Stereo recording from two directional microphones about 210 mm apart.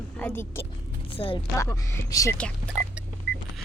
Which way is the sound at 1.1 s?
25° left (ahead or behind).